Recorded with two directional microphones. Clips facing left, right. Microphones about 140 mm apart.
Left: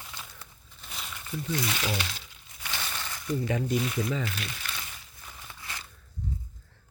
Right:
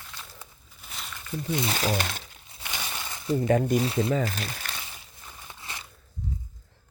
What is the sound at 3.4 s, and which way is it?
Speech, 50° right (ahead or behind).